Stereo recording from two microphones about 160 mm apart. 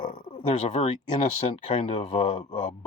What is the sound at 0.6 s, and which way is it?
Speech, 50° left (ahead or behind).